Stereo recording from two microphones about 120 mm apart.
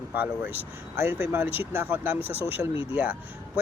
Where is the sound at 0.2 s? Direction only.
15° right (ahead or behind).